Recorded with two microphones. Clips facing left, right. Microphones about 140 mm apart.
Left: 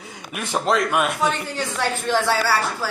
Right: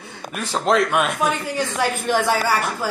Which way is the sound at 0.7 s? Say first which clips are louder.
Right 2 dB; centre (ahead or behind).